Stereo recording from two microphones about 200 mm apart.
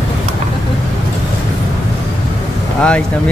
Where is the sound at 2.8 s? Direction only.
5° left (ahead or behind).